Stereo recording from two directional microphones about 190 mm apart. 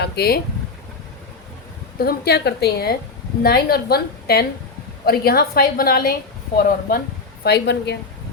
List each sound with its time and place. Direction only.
0.0 s a sound: 55° left (ahead or behind)
2.0 s a woman's voice: 55° left (ahead or behind)
7.4 s a woman's voice: 60° left (ahead or behind)